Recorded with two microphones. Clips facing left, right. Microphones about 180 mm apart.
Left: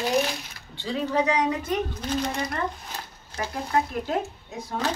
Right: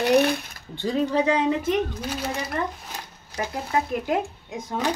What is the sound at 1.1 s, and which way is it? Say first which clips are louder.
Speech: even; 30° right (ahead or behind).